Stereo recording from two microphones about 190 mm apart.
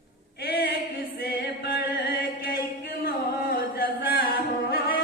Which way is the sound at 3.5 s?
50° left (ahead or behind).